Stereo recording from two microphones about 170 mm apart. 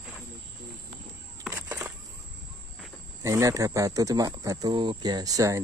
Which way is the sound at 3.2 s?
20° right (ahead or behind).